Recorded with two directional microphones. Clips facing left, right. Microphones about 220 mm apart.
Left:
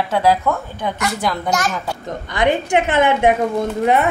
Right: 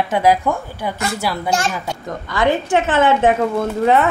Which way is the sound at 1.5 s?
30° right (ahead or behind).